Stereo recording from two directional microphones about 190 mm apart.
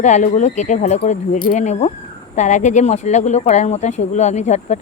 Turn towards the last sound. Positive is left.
turn(degrees=40)  # may be behind; listen again after turning